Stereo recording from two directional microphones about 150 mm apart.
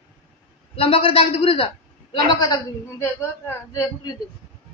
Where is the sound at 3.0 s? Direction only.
20° left (ahead or behind).